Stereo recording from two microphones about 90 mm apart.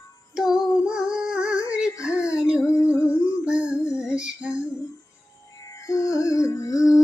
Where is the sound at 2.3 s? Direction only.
10° right (ahead or behind).